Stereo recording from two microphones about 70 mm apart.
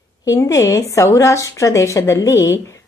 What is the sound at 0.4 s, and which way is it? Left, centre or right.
A woman's voice, left.